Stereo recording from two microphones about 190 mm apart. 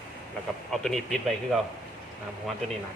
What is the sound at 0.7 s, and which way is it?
Speech, centre (ahead or behind).